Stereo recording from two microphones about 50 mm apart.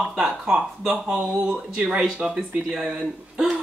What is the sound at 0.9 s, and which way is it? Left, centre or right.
A woman's voice, centre.